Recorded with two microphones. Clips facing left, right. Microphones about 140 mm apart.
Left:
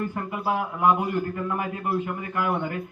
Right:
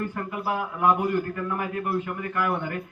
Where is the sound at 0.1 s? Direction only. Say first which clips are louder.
Left 2 dB; 20° left (ahead or behind).